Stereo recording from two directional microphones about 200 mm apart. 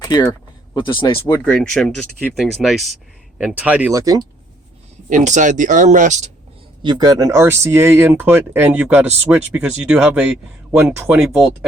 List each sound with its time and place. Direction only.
0.1 s speech: 20° left (ahead or behind)
1.3 s speech: 5° left (ahead or behind); by 4.3 s 20° right (ahead or behind)
5.0 s speech: 40° right (ahead or behind)
6.8 s speech: 20° right (ahead or behind); by 11.5 s 5° right (ahead or behind)